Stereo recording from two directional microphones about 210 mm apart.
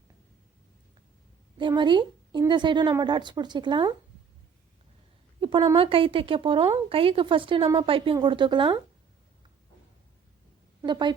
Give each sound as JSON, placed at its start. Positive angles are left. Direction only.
{"t": 1.5, "sound": "speech", "side_deg": -20}
{"t": 5.4, "sound": "speech", "side_deg": -20}
{"t": 10.8, "sound": "speech", "side_deg": -20}